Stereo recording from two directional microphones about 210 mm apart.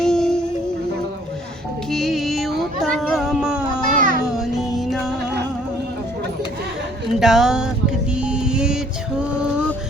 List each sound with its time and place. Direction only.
0.0 s music: 5° left (ahead or behind)
1.9 s music: centre (ahead or behind)
2.6 s a sound: centre (ahead or behind)
3.8 s a sound: 40° right (ahead or behind)
4.4 s music: centre (ahead or behind)
7.2 s music: centre (ahead or behind)